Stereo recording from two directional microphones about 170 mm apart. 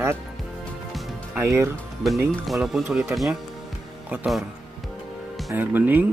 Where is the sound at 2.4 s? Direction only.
Centre (ahead or behind).